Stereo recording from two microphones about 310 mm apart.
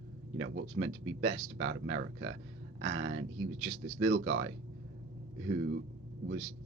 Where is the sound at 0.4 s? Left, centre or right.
Right.